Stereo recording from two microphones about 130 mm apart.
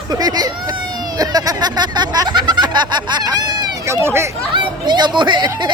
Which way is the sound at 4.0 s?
20° right (ahead or behind).